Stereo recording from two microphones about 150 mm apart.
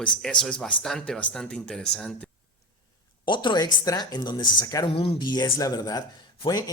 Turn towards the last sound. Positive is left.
turn(degrees=30)  # may be behind; listen again after turning